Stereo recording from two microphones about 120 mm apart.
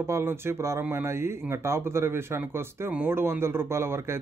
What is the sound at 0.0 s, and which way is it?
Speech, 20° right (ahead or behind).